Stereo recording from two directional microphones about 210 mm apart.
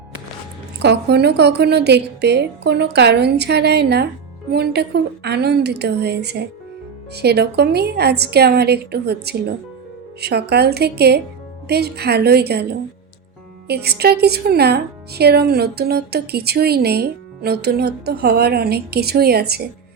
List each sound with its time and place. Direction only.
0.8 s a woman's voice: 50° right (ahead or behind)
13.7 s a woman's voice: 50° right (ahead or behind)